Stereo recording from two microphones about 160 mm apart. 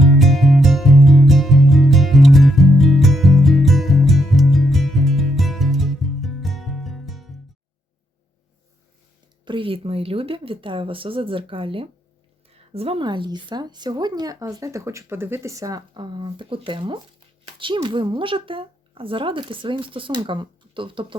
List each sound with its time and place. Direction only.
0.0 s music: centre (ahead or behind)
9.4 s speech: 30° right (ahead or behind)